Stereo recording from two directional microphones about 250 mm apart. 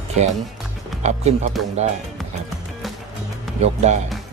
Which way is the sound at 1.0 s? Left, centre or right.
Right.